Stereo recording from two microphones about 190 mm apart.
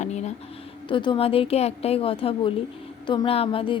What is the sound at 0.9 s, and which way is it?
A woman's voice, 25° left (ahead or behind).